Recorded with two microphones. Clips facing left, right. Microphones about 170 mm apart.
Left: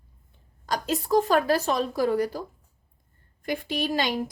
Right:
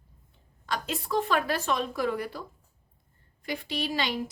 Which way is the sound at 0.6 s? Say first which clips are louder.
Left 5 dB; 40° left (ahead or behind).